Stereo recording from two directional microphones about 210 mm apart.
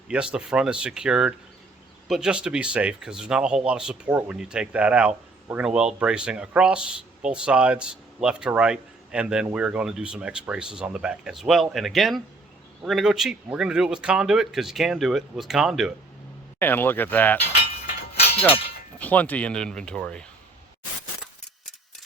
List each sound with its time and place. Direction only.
0.1 s speech: 5° right (ahead or behind)
16.6 s speech: 10° left (ahead or behind)
18.2 s clang: 30° left (ahead or behind)
18.9 s speech: 5° left (ahead or behind)